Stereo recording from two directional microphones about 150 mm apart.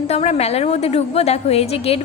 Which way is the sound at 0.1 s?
45° left (ahead or behind).